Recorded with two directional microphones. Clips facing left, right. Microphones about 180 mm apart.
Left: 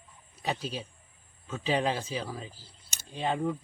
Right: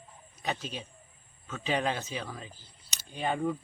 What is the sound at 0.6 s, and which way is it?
Speech, 35° left (ahead or behind).